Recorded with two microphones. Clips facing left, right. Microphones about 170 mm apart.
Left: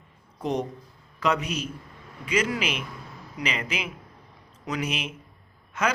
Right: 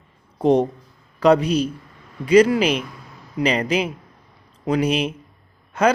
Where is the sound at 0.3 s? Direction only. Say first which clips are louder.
Right 11 dB; 30° right (ahead or behind).